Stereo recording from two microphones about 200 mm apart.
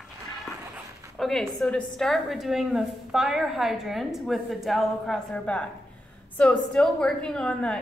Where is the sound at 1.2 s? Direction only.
Centre (ahead or behind).